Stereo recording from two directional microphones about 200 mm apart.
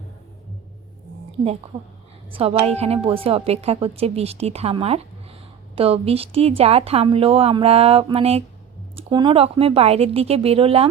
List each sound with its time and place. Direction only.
2.3 s a woman's voice: 25° right (ahead or behind)